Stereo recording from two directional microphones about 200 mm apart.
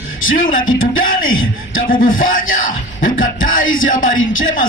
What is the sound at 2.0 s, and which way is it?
Speech, 45° left (ahead or behind).